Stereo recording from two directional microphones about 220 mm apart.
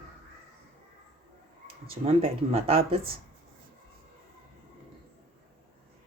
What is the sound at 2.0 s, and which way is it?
Speech, 25° right (ahead or behind).